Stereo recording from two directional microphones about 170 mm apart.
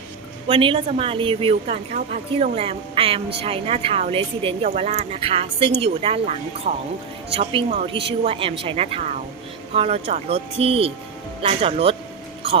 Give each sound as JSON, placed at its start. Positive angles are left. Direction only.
{"t": 0.4, "sound": "a woman's voice", "side_deg": -30}
{"t": 6.7, "sound": "speech", "side_deg": -60}
{"t": 7.3, "sound": "a woman's voice", "side_deg": -40}